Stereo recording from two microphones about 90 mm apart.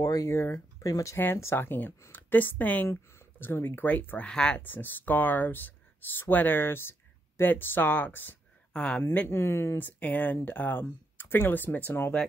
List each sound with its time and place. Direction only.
0.0 s speech: 40° left (ahead or behind); by 4.6 s 10° left (ahead or behind)
4.6 s speech: 20° left (ahead or behind)
8.7 s speech: 10° left (ahead or behind)
9.3 s speech: 30° left (ahead or behind)